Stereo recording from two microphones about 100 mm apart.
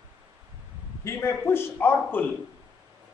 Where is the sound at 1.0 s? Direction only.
25° left (ahead or behind).